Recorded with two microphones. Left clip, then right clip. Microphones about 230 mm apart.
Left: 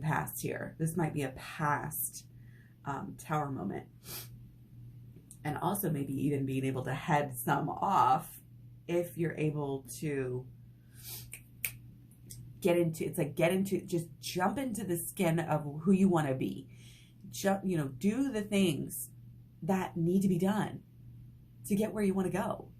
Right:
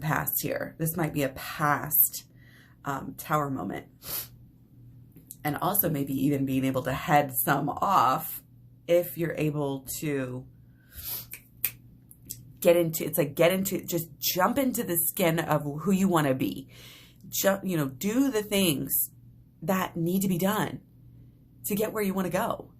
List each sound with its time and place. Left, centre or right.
0.0 s speech: right
2.8 s speech: right
5.4 s speech: right
12.5 s speech: right
21.8 s speech: right